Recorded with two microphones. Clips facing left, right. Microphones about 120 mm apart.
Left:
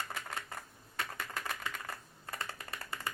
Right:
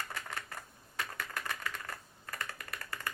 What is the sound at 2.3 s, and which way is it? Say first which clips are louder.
Typing: even; 30° left (ahead or behind).